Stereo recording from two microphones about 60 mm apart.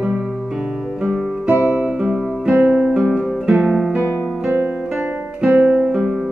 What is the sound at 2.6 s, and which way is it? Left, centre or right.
Guitar, right.